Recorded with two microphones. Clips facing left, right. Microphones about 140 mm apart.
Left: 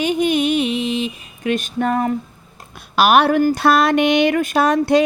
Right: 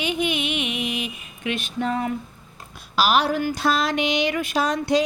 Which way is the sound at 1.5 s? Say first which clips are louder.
Left 6 dB; 45° left (ahead or behind).